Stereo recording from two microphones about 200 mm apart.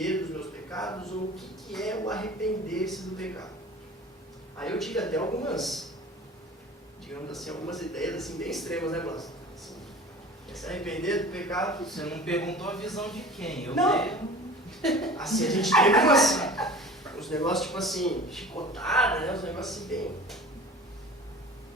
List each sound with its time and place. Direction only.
0.0 s a sound: centre (ahead or behind)
1.0 s speech: centre (ahead or behind)
4.6 s speech: centre (ahead or behind)
7.1 s speech: centre (ahead or behind)
10.5 s speech: centre (ahead or behind)